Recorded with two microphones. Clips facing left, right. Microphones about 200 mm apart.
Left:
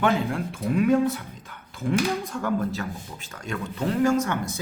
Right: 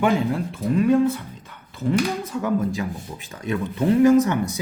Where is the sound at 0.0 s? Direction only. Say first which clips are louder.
Right 3 dB; centre (ahead or behind).